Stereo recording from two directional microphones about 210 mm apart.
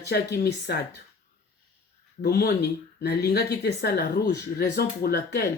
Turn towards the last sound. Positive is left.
turn(degrees=50)  # may be behind; listen again after turning